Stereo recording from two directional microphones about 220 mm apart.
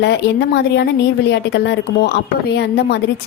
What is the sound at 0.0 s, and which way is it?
A woman's voice, 50° left (ahead or behind).